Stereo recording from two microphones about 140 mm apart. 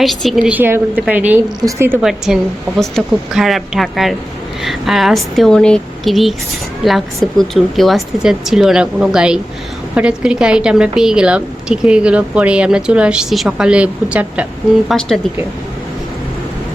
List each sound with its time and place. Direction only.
0.0 s speech: centre (ahead or behind)
0.5 s a woman's voice: 15° right (ahead or behind)
2.0 s a woman's voice: 5° right (ahead or behind)